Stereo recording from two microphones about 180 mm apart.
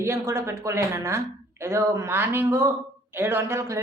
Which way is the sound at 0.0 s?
15° right (ahead or behind).